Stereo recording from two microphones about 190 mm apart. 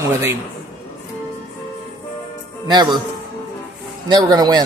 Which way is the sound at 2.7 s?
25° right (ahead or behind).